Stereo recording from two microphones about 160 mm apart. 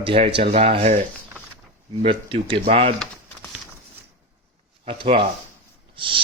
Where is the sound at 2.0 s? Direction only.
35° right (ahead or behind).